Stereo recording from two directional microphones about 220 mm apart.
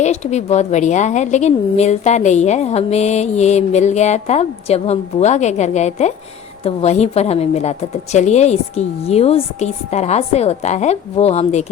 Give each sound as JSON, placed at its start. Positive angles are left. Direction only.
{"t": 0.0, "sound": "a woman's voice", "side_deg": 30}